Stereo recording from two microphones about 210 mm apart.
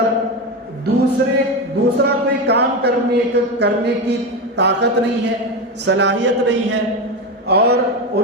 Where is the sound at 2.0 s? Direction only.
50° right (ahead or behind).